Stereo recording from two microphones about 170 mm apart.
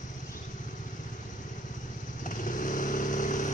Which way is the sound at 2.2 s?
50° left (ahead or behind).